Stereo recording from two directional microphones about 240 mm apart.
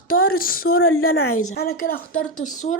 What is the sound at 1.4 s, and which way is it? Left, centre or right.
Speech, left.